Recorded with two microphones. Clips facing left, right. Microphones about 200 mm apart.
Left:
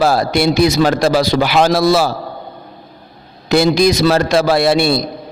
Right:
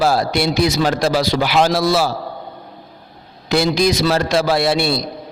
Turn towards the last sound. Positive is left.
turn(degrees=50)  # may be behind; listen again after turning